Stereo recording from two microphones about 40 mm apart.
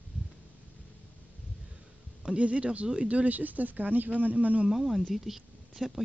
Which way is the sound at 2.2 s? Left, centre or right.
Right.